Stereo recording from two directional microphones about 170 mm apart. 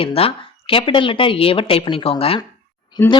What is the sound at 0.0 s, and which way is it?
Speech, 35° left (ahead or behind).